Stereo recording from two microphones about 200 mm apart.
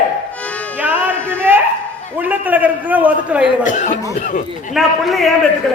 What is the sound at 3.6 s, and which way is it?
Speech, 40° left (ahead or behind).